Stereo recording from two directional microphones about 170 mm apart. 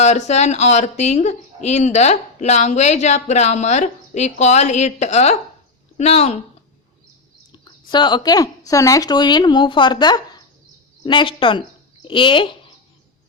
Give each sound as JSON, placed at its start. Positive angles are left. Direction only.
{"t": 0.0, "sound": "speech", "side_deg": 40}
{"t": 7.5, "sound": "speech", "side_deg": 25}